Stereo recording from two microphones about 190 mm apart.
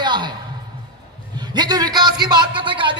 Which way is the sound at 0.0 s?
25° right (ahead or behind).